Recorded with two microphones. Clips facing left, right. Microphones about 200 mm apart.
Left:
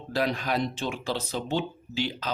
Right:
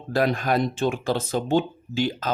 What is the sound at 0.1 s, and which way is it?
Speech, 50° right (ahead or behind).